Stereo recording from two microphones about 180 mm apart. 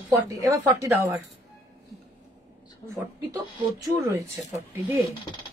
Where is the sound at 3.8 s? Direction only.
15° right (ahead or behind).